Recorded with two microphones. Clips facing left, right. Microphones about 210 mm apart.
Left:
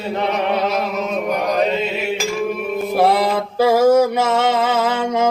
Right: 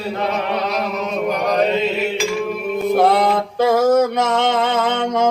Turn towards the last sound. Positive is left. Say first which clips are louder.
# even
turn(degrees=5)  # may be behind; listen again after turning